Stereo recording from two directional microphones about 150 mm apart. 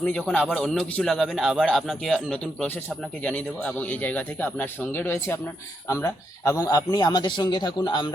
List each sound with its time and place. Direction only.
0.0 s a man's voice: 5° left (ahead or behind); by 8.1 s 30° left (ahead or behind)